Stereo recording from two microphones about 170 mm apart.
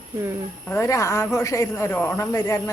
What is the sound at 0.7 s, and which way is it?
A man's voice, 15° left (ahead or behind).